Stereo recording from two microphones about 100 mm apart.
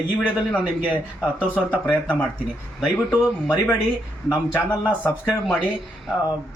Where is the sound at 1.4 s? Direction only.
15° right (ahead or behind).